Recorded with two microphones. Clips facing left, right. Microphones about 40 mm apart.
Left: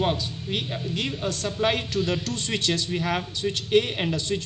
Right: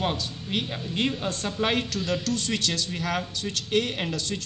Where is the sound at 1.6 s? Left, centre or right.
Centre.